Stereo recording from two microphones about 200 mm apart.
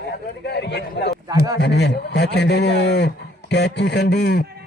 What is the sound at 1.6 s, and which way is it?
A man's voice, 55° left (ahead or behind).